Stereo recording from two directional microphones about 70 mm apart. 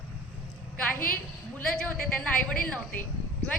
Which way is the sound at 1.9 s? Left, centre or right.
Centre.